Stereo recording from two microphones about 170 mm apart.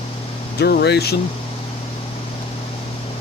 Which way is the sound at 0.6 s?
75° left (ahead or behind).